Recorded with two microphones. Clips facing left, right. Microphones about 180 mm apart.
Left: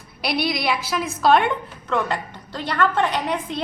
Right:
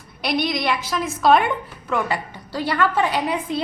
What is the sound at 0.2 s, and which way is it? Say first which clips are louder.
A woman's voice: right 1 dB; 5° left (ahead or behind).